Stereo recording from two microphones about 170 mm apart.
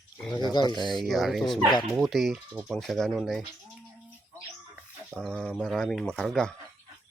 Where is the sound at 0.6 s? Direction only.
25° left (ahead or behind).